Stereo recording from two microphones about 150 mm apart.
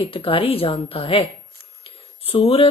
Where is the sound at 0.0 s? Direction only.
40° left (ahead or behind).